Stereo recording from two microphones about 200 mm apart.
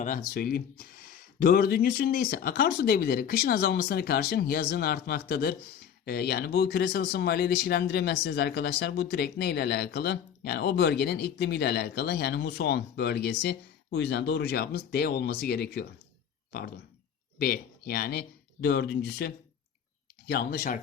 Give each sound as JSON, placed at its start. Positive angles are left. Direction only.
{"t": 0.0, "sound": "speech", "side_deg": 45}